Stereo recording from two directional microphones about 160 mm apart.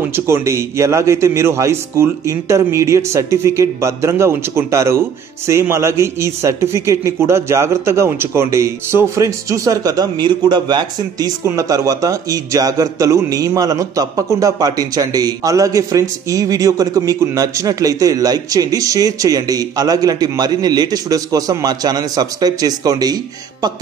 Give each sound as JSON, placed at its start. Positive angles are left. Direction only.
{"t": 0.0, "sound": "a man's voice", "side_deg": -15}